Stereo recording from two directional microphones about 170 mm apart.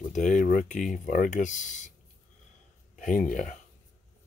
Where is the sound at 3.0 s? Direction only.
50° left (ahead or behind).